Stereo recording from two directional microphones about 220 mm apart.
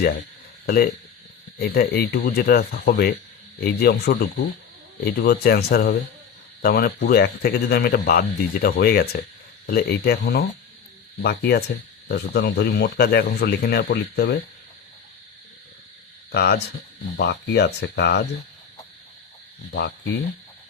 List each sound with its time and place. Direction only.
0.6 s speech: 40° left (ahead or behind)
16.3 s speech: 45° left (ahead or behind)
19.7 s speech: 50° left (ahead or behind)